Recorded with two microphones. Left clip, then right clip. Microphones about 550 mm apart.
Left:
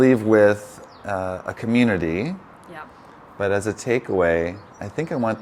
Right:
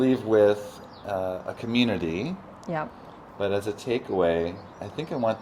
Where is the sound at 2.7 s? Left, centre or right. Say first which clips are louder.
Right 8 dB; right.